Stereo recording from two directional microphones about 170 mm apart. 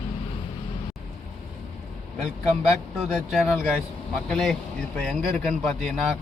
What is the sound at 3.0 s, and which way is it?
Speech, centre (ahead or behind).